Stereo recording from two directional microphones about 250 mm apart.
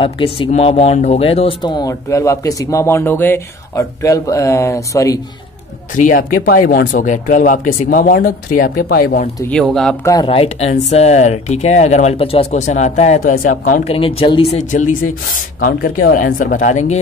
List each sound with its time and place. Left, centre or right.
0.0 s speech: left
5.9 s speech: left
9.4 s speech: centre
10.1 s speech: left